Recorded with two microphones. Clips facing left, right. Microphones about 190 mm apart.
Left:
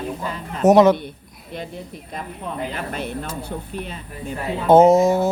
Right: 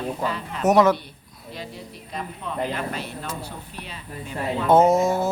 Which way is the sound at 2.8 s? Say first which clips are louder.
Left 3 dB; 50° left (ahead or behind).